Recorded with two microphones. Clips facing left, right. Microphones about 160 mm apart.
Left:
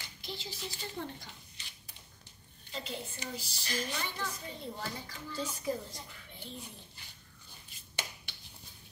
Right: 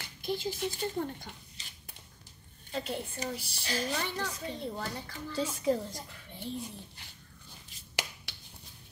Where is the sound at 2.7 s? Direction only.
55° right (ahead or behind).